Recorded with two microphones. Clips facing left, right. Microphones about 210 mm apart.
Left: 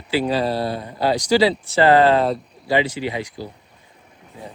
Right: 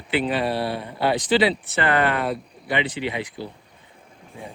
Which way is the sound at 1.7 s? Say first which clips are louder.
Left 7 dB; 25° left (ahead or behind).